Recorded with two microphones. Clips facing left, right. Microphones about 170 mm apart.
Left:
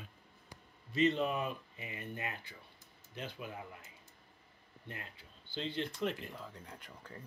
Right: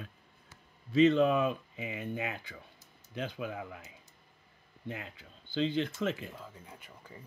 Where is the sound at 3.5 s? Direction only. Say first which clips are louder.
Right 6 dB; 90° right.